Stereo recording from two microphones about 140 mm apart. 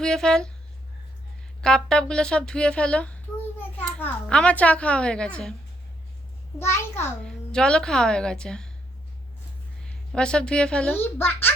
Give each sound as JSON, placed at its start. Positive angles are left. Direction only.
{"t": 0.0, "sound": "a woman's voice", "side_deg": 5}
{"t": 1.6, "sound": "a child's voice", "side_deg": 5}
{"t": 6.6, "sound": "a child's voice", "side_deg": 15}
{"t": 7.2, "sound": "a woman's voice", "side_deg": 5}
{"t": 9.8, "sound": "a child's voice", "side_deg": 5}